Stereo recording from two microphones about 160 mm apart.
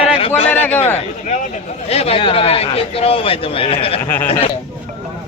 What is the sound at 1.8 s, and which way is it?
A man's voice, 40° left (ahead or behind).